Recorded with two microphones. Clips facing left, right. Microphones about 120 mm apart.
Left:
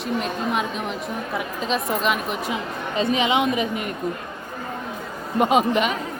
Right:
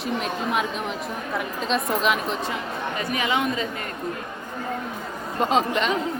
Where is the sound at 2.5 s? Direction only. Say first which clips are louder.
Left 1 dB; 20° left (ahead or behind).